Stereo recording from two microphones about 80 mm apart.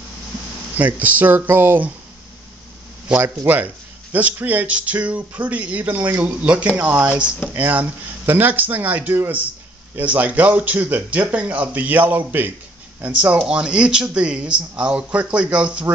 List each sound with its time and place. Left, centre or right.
0.7 s speech: right
3.2 s speech: right